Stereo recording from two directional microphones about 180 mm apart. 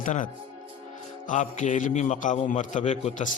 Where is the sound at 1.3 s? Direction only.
45° left (ahead or behind).